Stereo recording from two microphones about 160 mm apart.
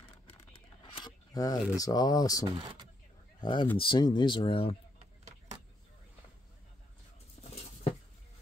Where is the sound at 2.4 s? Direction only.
30° right (ahead or behind).